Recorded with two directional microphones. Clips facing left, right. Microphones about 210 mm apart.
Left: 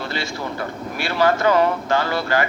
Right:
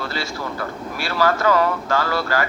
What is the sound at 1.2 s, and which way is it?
Speech, 25° left (ahead or behind).